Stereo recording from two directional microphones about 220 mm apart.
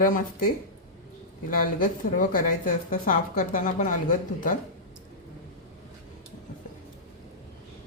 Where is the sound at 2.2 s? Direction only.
40° left (ahead or behind).